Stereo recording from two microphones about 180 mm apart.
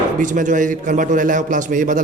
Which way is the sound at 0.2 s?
45° right (ahead or behind).